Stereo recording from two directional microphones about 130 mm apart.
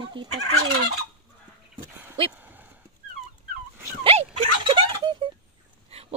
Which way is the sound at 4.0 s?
50° right (ahead or behind).